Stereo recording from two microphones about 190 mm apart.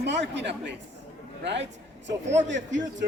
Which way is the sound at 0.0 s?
65° right (ahead or behind).